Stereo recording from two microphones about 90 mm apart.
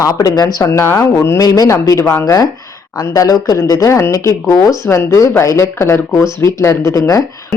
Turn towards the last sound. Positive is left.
turn(degrees=40)  # may be behind; listen again after turning